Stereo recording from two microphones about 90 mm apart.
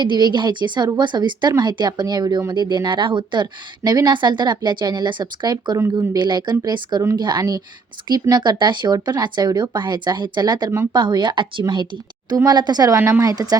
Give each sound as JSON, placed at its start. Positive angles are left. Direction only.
{"t": 0.0, "sound": "speech", "side_deg": -55}
{"t": 5.7, "sound": "speech", "side_deg": -30}
{"t": 6.1, "sound": "speech", "side_deg": -55}
{"t": 13.0, "sound": "speech", "side_deg": -30}
{"t": 13.3, "sound": "speech", "side_deg": -45}